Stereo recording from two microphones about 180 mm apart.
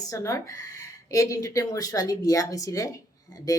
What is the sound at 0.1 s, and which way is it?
Speech, 15° left (ahead or behind).